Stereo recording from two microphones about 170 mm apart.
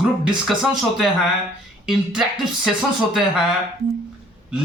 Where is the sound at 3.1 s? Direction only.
5° right (ahead or behind).